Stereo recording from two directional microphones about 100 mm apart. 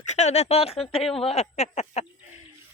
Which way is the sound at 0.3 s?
90° left.